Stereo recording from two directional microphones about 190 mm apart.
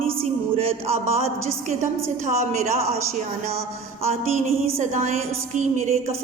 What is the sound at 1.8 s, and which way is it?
A woman's voice, 40° right (ahead or behind).